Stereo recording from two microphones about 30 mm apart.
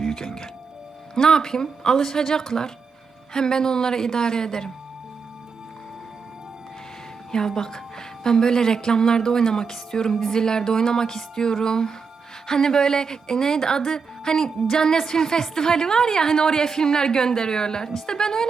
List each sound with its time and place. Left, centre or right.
0.0 s music: centre
1.1 s a woman's voice: left
7.3 s a woman's voice: left